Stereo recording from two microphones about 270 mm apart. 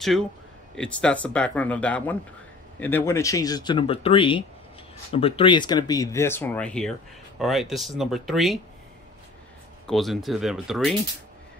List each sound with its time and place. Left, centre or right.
0.7 s speech: centre
9.8 s speech: centre